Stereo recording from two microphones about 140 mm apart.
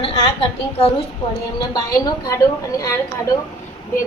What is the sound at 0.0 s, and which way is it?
Speech, 40° left (ahead or behind).